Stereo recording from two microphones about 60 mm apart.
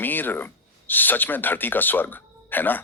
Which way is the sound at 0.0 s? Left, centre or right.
Left.